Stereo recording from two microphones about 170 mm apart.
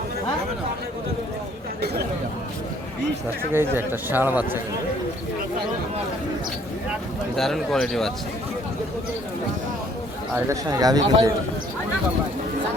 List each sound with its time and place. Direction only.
3.5 s speech: 15° right (ahead or behind)
7.3 s speech: centre (ahead or behind)
10.3 s a man's voice: 20° right (ahead or behind)